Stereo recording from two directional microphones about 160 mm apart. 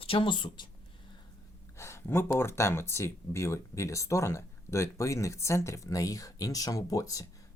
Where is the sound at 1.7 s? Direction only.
15° left (ahead or behind).